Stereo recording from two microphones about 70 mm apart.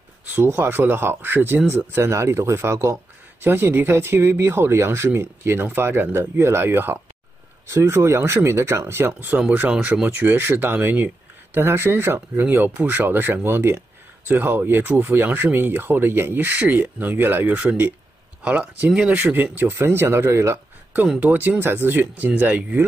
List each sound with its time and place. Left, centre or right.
0.3 s speech: right
2.0 s speech: right
9.7 s speech: centre
10.0 s speech: right
19.1 s speech: right
21.2 s speech: right